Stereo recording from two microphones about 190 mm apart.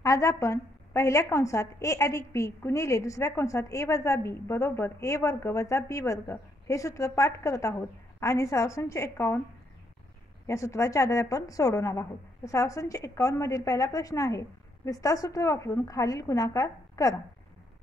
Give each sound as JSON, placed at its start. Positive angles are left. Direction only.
{"t": 0.0, "sound": "a woman's voice", "side_deg": 15}
{"t": 10.4, "sound": "a woman's voice", "side_deg": 15}